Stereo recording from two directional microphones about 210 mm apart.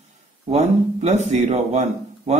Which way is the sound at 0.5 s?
35° right (ahead or behind).